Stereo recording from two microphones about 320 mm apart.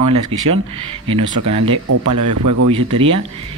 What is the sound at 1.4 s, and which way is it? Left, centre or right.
Speech, right.